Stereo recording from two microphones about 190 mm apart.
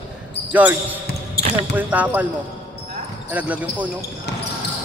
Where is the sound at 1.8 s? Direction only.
10° right (ahead or behind).